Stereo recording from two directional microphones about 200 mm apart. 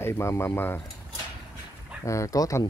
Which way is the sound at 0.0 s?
15° left (ahead or behind).